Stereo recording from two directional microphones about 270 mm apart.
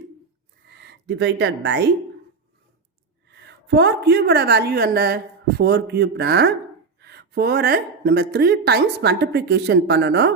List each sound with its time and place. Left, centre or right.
0.9 s speech: right
3.2 s a woman's voice: right